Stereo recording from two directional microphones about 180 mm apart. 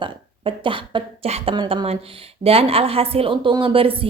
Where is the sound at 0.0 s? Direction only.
30° right (ahead or behind).